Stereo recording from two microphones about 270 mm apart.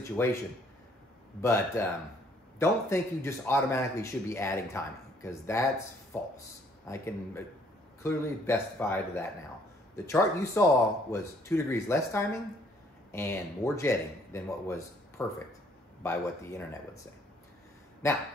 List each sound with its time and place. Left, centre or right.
0.1 s speech: centre
1.4 s speech: centre
6.9 s speech: centre
18.0 s speech: centre